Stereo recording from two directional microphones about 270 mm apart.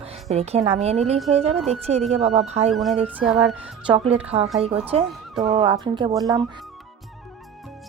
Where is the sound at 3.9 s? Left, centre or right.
Right.